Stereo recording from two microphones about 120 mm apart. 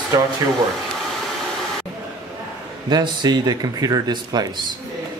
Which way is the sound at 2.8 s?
40° right (ahead or behind).